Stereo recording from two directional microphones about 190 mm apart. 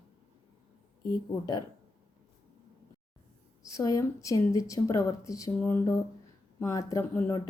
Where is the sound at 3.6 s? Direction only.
20° left (ahead or behind).